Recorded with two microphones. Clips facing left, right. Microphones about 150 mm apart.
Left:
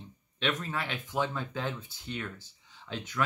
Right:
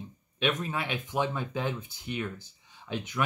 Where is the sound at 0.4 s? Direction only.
15° right (ahead or behind).